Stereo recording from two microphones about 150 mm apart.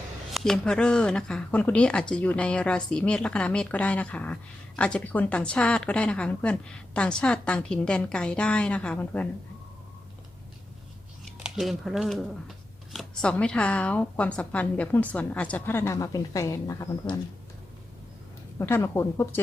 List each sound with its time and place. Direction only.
0.3 s a woman's voice: 5° left (ahead or behind)
11.4 s speech: centre (ahead or behind)
12.9 s a sound: centre (ahead or behind)
13.3 s a woman's voice: 5° left (ahead or behind)
18.6 s a woman's voice: 15° left (ahead or behind)